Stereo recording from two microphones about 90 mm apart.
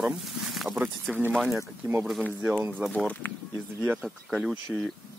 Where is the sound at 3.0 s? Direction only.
15° left (ahead or behind).